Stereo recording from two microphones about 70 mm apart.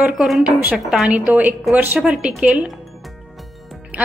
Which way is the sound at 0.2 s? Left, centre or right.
Centre.